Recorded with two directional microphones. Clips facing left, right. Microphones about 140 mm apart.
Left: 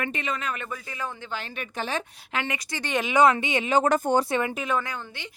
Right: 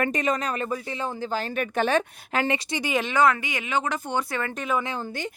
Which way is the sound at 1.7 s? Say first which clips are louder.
Right 7 dB; 60° right (ahead or behind).